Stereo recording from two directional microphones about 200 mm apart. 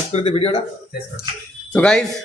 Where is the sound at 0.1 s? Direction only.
30° left (ahead or behind).